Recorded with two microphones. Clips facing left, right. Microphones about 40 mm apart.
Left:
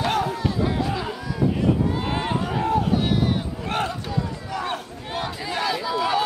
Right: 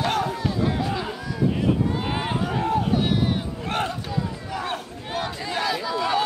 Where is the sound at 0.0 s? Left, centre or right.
Centre.